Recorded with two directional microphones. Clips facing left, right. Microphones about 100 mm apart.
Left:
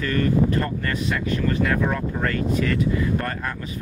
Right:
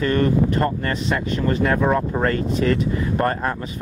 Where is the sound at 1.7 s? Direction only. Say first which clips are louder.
Right 4 dB; 35° right (ahead or behind).